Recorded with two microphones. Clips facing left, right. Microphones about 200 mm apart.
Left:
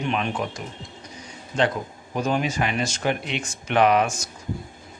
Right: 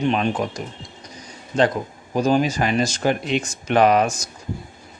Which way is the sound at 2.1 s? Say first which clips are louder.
Right 6 dB; 35° right (ahead or behind).